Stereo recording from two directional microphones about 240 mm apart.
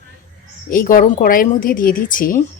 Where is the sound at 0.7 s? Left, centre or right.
Left.